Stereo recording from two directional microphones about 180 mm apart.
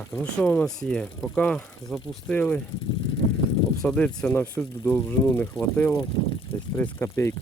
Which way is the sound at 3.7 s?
5° left (ahead or behind).